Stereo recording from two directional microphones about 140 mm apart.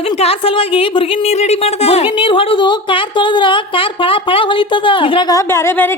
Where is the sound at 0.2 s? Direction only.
45° left (ahead or behind).